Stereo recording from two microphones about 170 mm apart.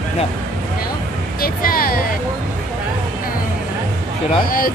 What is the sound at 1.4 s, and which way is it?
Speech, 60° left (ahead or behind).